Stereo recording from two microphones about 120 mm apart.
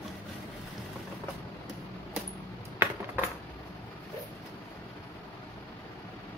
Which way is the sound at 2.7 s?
20° right (ahead or behind).